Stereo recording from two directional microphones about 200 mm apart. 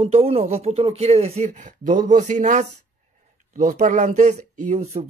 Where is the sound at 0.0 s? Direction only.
30° right (ahead or behind).